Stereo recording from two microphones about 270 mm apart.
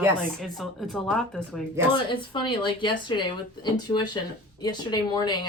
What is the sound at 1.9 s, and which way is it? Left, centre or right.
Speech, centre.